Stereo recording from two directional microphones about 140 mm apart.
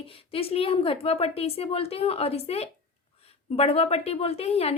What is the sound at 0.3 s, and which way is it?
A woman's voice, 45° left (ahead or behind).